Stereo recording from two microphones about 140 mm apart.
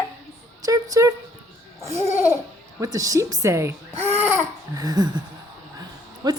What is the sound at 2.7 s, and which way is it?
A woman's voice, 25° right (ahead or behind).